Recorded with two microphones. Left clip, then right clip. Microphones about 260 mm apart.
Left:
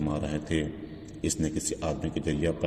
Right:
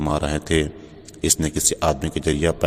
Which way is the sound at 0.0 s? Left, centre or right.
Right.